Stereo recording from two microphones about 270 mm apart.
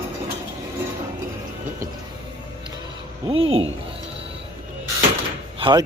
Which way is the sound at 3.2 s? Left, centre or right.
Centre.